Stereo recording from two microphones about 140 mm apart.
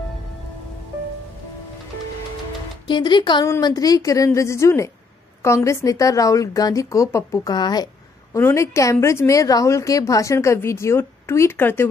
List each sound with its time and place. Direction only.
2.9 s speech: 35° left (ahead or behind)
8.4 s speech: 20° left (ahead or behind)